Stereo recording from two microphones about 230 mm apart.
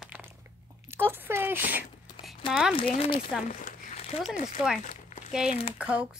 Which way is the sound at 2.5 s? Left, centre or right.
Centre.